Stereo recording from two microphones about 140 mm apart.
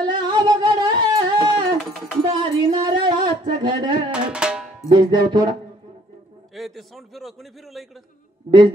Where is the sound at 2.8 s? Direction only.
30° right (ahead or behind).